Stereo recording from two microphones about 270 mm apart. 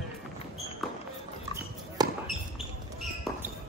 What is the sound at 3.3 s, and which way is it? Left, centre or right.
Basketball bounce, centre.